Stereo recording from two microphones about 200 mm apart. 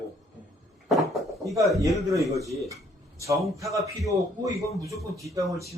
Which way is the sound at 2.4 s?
15° right (ahead or behind).